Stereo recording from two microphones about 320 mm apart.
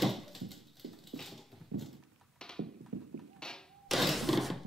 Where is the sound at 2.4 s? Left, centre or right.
Centre.